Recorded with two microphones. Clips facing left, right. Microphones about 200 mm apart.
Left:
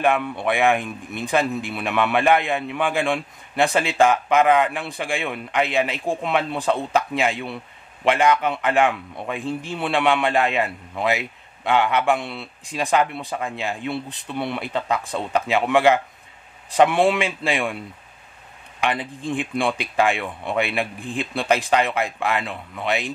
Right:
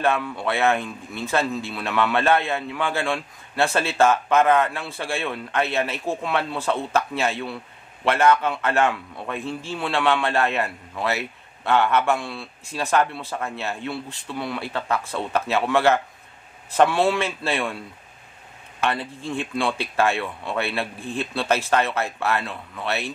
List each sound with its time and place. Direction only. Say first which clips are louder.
0.0 s a man's voice: left 2 dB; 15° left (ahead or behind)
18.8 s a man's voice: left 1 dB; 15° left (ahead or behind)